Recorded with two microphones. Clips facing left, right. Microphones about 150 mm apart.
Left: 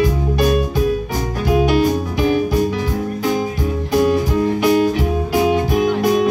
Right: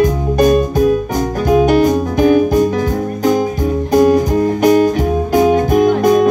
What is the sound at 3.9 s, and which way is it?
Music, 45° right (ahead or behind).